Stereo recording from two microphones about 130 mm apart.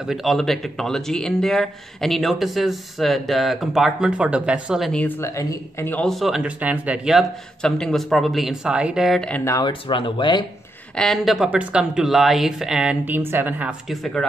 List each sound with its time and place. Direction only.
0.0 s speech: centre (ahead or behind)
4.9 s speech: 15° left (ahead or behind)
5.9 s speech: 5° left (ahead or behind)
9.4 s speech: 25° left (ahead or behind)
9.7 s speech: 40° left (ahead or behind)
11.0 s speech: centre (ahead or behind)